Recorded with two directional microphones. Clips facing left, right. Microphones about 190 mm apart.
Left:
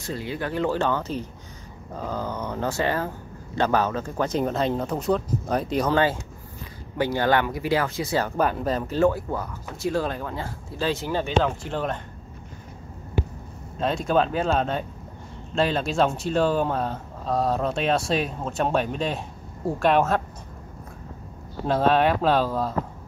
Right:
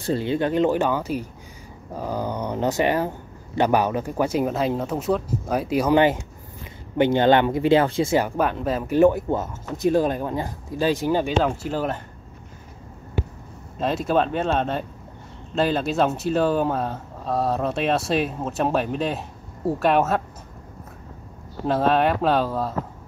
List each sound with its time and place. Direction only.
0.0 s speech: 30° right (ahead or behind); by 5.9 s 5° right (ahead or behind)
7.0 s speech: 20° right (ahead or behind)
8.4 s speech: centre (ahead or behind)
8.8 s speech: 15° right (ahead or behind)
13.7 s speech: 5° right (ahead or behind)
21.6 s speech: centre (ahead or behind)